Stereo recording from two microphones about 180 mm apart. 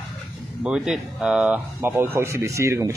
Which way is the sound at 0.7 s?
5° right (ahead or behind).